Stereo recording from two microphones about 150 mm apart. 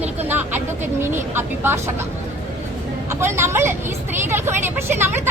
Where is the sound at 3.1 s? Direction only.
15° right (ahead or behind).